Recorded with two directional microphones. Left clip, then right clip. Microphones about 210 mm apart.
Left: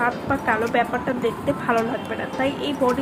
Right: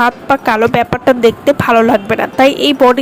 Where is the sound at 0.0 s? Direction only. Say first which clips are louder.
Right 11 dB; 50° right (ahead or behind).